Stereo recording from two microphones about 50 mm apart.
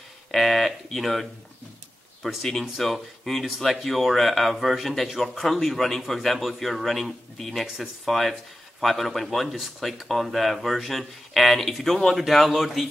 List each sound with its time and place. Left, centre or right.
0.3 s a sound: centre
2.2 s speech: centre
7.6 s speech: centre
8.0 s speech: centre